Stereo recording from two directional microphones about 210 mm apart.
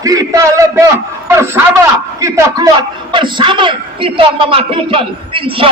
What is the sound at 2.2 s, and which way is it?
A man's voice, 15° right (ahead or behind).